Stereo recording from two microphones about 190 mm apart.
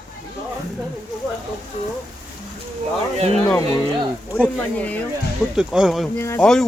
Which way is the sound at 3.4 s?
20° left (ahead or behind).